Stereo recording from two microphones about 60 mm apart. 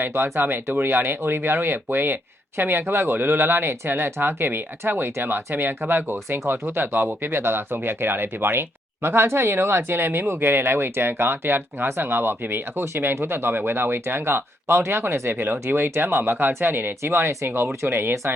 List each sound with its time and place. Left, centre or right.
0.0 s speech: right